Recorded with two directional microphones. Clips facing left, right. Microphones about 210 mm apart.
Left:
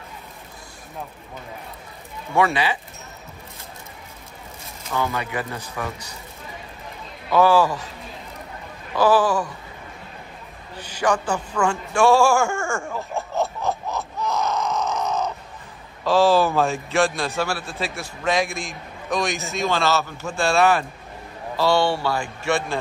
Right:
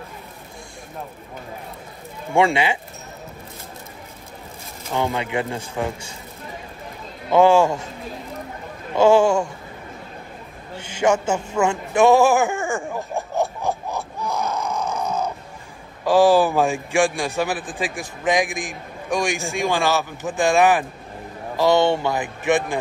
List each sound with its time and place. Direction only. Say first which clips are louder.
2.3 s speech: right 2 dB; 25° right (ahead or behind)
4.9 s speech: right 3 dB; 25° right (ahead or behind)
7.2 s speech: right 2 dB; 25° right (ahead or behind)
8.9 s speech: right 3 dB; 25° right (ahead or behind)
11.0 s a sound: right 3 dB; 25° right (ahead or behind)
16.0 s a man's voice: right 2 dB; 15° right (ahead or behind)